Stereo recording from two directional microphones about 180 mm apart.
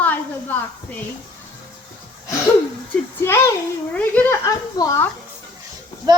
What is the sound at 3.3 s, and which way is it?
Speech, 15° left (ahead or behind).